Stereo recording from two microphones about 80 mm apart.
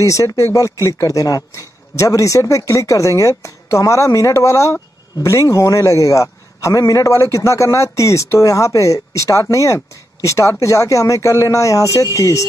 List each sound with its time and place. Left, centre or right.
0.0 s a man's voice: left